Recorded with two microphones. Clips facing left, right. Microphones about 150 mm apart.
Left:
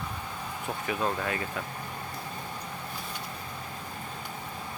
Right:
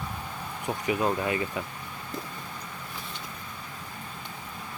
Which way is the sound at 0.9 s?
15° right (ahead or behind).